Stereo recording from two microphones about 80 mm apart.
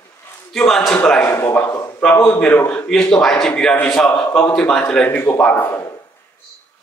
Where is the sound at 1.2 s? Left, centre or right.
Left.